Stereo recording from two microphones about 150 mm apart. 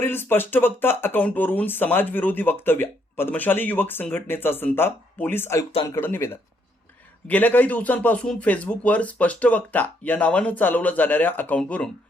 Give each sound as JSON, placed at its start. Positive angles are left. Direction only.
{"t": 0.0, "sound": "a man's voice", "side_deg": 15}